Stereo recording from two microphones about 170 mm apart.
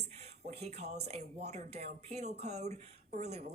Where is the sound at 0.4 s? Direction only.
40° right (ahead or behind).